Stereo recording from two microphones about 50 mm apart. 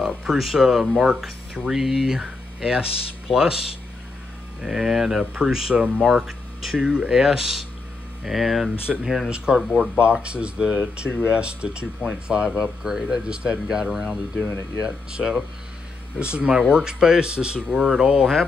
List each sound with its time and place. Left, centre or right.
0.0 s speech: centre
4.6 s speech: centre
9.9 s speech: right